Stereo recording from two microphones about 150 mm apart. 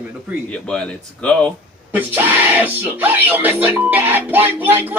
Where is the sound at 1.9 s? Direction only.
15° right (ahead or behind).